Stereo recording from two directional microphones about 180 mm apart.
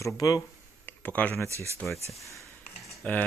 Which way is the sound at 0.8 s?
10° left (ahead or behind).